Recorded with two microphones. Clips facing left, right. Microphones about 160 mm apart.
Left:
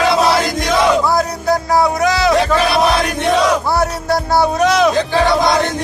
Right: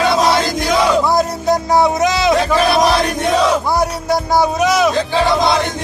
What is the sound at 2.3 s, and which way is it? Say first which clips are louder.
Crowd: left 1 dB; centre (ahead or behind).